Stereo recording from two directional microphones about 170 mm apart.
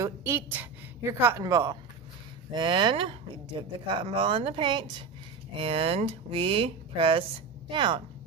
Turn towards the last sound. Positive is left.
turn(degrees=-30)  # may be behind; listen again after turning